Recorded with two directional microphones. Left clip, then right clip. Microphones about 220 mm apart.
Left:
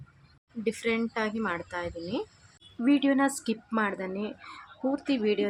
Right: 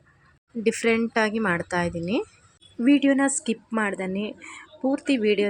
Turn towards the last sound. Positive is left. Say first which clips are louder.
# right 5 dB
turn(degrees=-20)  # may be behind; listen again after turning